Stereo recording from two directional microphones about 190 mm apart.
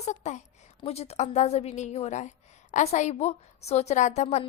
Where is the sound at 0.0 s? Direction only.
40° left (ahead or behind).